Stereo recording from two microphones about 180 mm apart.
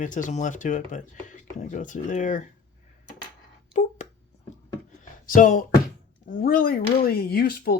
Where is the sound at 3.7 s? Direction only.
40° left (ahead or behind).